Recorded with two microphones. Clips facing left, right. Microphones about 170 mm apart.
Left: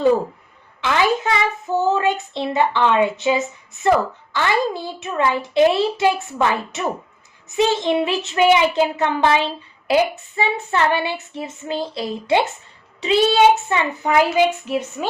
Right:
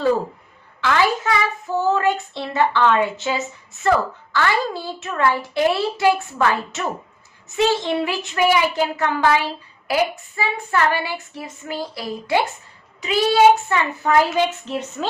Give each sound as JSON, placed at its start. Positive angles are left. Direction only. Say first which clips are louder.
{"t": 0.8, "sound": "a child's voice", "louder": "left 1 dB", "side_deg": 20}